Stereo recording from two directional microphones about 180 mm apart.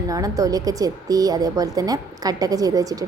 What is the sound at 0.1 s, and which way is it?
A woman's voice, 20° right (ahead or behind).